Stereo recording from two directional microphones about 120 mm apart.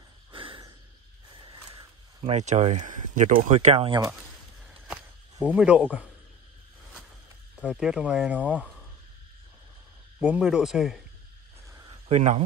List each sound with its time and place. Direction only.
0.3 s snort: 45° right (ahead or behind)
1.4 s a sound: 40° right (ahead or behind)
2.2 s speech: 75° right (ahead or behind); by 4.0 s 50° right (ahead or behind)
5.4 s speech: 10° right (ahead or behind)
7.5 s speech: 10° right (ahead or behind)
10.4 s speech: centre (ahead or behind)
12.1 s speech: 70° right (ahead or behind)